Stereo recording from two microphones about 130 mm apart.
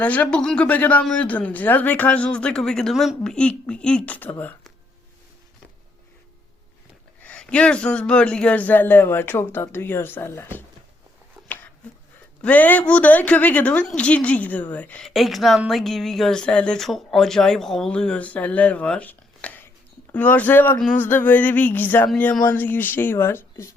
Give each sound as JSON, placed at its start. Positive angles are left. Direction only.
{"t": 0.0, "sound": "a man's voice", "side_deg": 10}
{"t": 7.2, "sound": "a man's voice", "side_deg": 10}
{"t": 12.4, "sound": "a man's voice", "side_deg": 10}
{"t": 15.1, "sound": "a woman's voice", "side_deg": 0}